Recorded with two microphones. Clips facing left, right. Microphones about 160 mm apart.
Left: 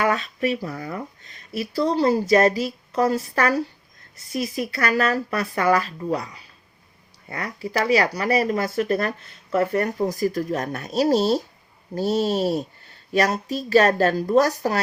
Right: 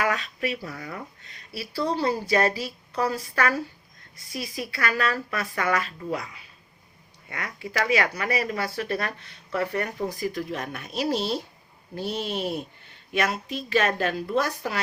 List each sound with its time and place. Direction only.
0.0 s speech: 35° left (ahead or behind)